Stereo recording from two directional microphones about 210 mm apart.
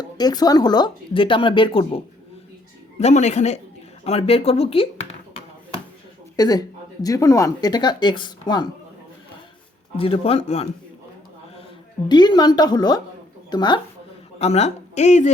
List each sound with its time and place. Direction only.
0.0 s speech: 20° left (ahead or behind)
3.0 s speech: 35° left (ahead or behind)
6.3 s speech: 20° left (ahead or behind)
10.0 s speech: 25° left (ahead or behind)
12.0 s a woman's voice: 20° left (ahead or behind)